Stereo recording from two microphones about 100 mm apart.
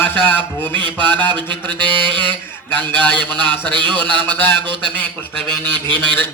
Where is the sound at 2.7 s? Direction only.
20° left (ahead or behind).